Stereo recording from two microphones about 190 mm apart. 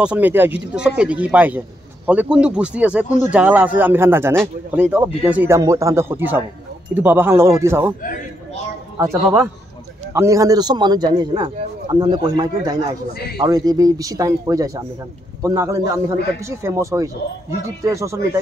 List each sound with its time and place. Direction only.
0.0 s speech: 5° right (ahead or behind)
8.9 s a man's voice: 15° right (ahead or behind)
13.1 s a man's voice: 55° left (ahead or behind)
13.4 s a man's voice: 20° right (ahead or behind)